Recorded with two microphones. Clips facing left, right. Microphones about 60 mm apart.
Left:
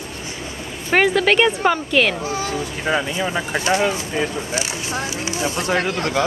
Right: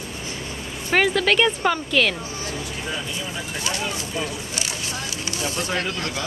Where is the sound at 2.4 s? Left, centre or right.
Left.